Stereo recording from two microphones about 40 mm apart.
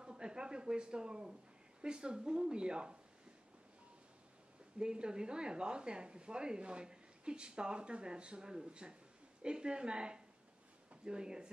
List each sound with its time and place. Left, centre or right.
0.0 s speech: centre
4.7 s speech: right